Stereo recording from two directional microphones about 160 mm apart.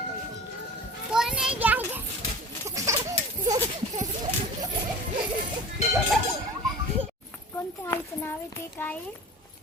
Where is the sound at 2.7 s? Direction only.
20° right (ahead or behind).